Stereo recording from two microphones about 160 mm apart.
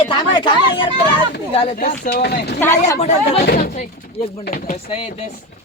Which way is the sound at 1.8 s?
75° left (ahead or behind).